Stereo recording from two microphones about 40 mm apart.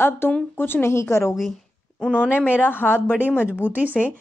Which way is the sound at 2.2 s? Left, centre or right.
Right.